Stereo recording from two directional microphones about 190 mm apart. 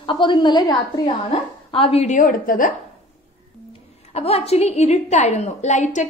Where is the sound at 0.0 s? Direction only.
25° left (ahead or behind); by 2.7 s 45° left (ahead or behind).